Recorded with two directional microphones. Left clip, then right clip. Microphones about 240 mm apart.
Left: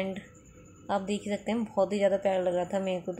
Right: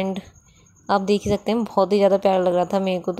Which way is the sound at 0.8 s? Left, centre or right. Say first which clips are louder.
Right 11 dB; right.